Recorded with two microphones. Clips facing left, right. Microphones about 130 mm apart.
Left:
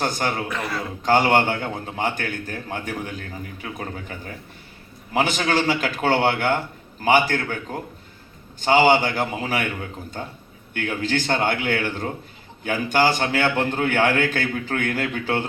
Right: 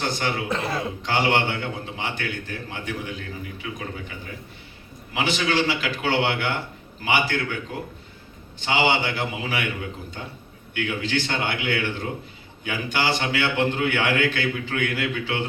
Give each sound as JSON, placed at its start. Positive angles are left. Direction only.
{"t": 0.0, "sound": "a man's voice", "side_deg": 45}
{"t": 0.4, "sound": "speech", "side_deg": -25}
{"t": 1.0, "sound": "a man's voice", "side_deg": 45}